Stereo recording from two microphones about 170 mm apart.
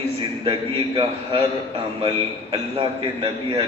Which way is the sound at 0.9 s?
35° right (ahead or behind).